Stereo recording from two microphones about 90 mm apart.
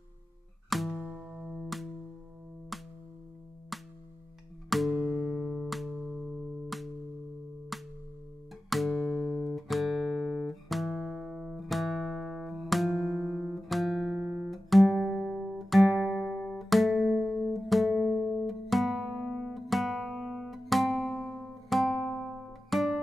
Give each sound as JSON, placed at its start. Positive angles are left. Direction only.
{"t": 0.7, "sound": "music", "side_deg": 0}
{"t": 13.1, "sound": "guitar", "side_deg": -20}
{"t": 13.7, "sound": "music", "side_deg": 0}
{"t": 14.2, "sound": "music", "side_deg": -15}
{"t": 14.5, "sound": "music", "side_deg": 0}
{"t": 15.7, "sound": "guitar", "side_deg": 0}
{"t": 16.5, "sound": "music", "side_deg": 0}